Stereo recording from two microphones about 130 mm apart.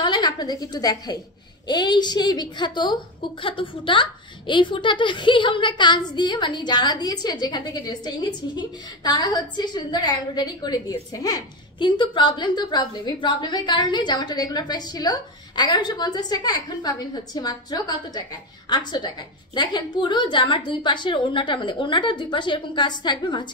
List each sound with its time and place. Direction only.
0.0 s a woman's voice: 35° left (ahead or behind)